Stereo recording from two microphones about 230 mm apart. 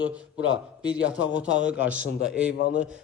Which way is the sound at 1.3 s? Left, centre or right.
Left.